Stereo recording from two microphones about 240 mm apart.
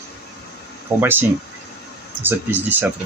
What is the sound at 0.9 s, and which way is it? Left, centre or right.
Speech, centre.